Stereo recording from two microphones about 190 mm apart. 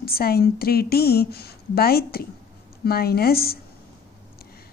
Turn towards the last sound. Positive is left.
turn(degrees=55)  # may be behind; listen again after turning